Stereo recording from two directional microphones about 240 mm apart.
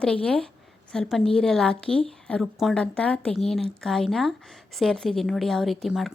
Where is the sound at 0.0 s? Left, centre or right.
Centre.